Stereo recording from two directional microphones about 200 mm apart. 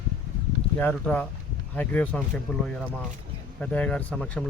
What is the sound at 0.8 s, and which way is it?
Speech, 10° left (ahead or behind).